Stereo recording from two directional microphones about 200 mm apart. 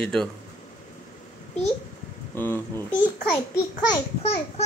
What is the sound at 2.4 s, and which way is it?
Speech, 10° left (ahead or behind).